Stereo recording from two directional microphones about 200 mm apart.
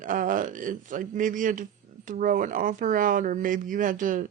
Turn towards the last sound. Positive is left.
turn(degrees=-40)  # may be behind; listen again after turning